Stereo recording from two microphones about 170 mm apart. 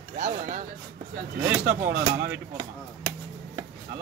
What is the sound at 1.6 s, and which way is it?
Speech, 65° right (ahead or behind).